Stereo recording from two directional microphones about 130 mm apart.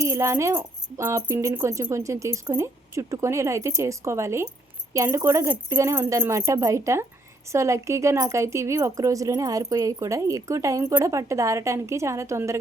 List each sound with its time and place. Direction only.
0.0 s a woman's voice: 20° right (ahead or behind)